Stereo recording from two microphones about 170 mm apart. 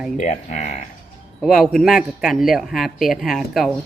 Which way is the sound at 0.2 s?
45° left (ahead or behind).